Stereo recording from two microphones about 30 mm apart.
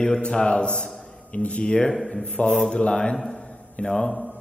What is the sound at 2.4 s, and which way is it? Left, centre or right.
Speech, left.